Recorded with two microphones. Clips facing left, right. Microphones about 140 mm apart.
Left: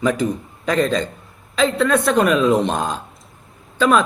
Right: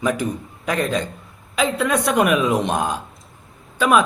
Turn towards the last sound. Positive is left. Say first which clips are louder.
# left 1 dB
turn(degrees=-10)  # may be behind; listen again after turning